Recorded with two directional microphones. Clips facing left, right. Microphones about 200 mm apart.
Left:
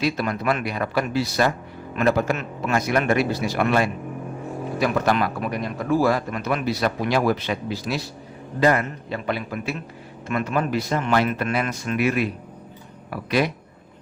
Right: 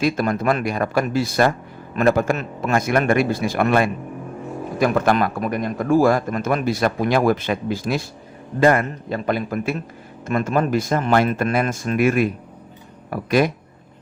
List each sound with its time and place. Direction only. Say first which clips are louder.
0.0 s speech: right 4 dB; 45° right (ahead or behind)